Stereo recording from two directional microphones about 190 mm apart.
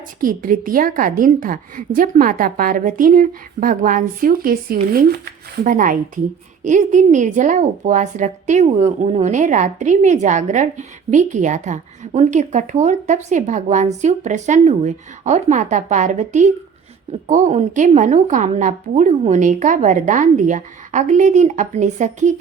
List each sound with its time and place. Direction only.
0.2 s a woman's voice: 45° right (ahead or behind)